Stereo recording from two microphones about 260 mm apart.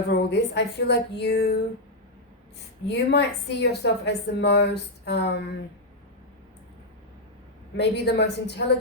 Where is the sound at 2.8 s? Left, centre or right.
Left.